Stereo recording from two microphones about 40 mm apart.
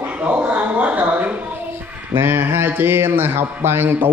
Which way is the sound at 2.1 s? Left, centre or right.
Right.